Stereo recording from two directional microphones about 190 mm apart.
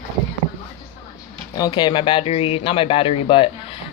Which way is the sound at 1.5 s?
20° left (ahead or behind).